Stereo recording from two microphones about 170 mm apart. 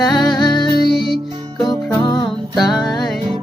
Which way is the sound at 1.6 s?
25° left (ahead or behind).